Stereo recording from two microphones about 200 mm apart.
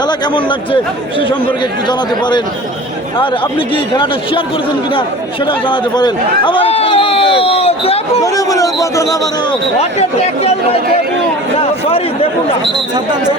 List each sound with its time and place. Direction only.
3.9 s a man's voice: 25° left (ahead or behind)
5.5 s a man's voice: 25° left (ahead or behind)
8.2 s speech: 15° left (ahead or behind)
10.0 s speech: 30° left (ahead or behind)